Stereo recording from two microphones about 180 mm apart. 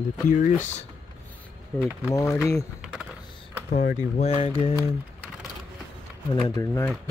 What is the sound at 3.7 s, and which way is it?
Speech, 50° left (ahead or behind).